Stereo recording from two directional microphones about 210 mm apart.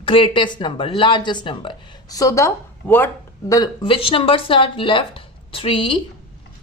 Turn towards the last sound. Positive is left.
turn(degrees=25)  # may be behind; listen again after turning